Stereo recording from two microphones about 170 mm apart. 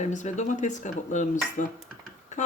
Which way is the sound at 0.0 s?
45° left (ahead or behind).